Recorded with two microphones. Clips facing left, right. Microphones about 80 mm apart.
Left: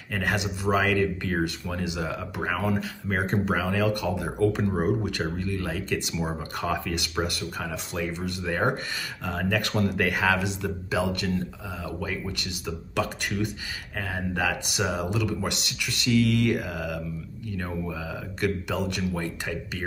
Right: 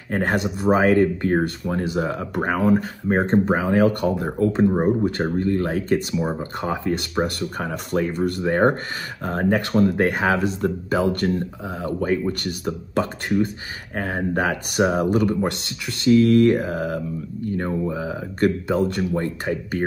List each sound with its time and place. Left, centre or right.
0.1 s speech: right
6.1 s speech: right
11.6 s speech: right
12.0 s speech: right
13.0 s speech: right